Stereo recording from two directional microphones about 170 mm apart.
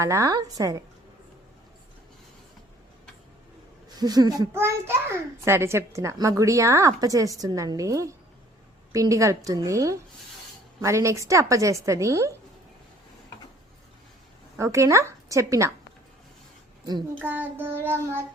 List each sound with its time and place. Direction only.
0.0 s a child's voice: 15° right (ahead or behind)
3.9 s a child's voice: 25° right (ahead or behind)
14.6 s a woman's voice: 15° right (ahead or behind)
17.2 s a woman's voice: 10° right (ahead or behind)